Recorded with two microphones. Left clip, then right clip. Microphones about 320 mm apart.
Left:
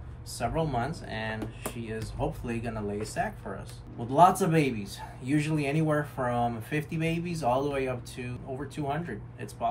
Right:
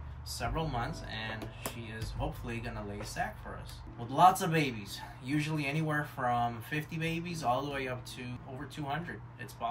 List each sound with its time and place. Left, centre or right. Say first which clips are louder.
0.4 s speech: left 6 dB; centre